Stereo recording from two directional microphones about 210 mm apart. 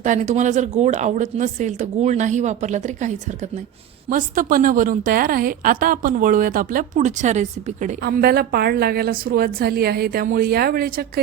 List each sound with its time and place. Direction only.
0.0 s a woman's voice: 35° right (ahead or behind)
4.1 s a woman's voice: 40° right (ahead or behind)